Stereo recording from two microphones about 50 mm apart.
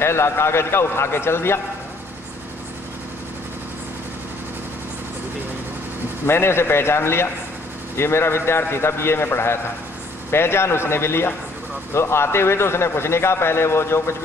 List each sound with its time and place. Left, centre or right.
0.0 s speech: left
6.2 s speech: left